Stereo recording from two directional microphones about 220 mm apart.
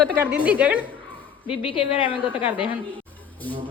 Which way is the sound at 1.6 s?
25° left (ahead or behind).